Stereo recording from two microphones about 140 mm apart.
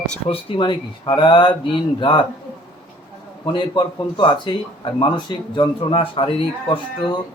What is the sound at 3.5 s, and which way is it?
Speech, 35° left (ahead or behind).